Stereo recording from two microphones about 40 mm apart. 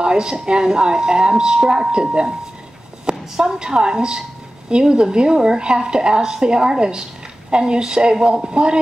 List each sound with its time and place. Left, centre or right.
0.0 s a woman's voice: right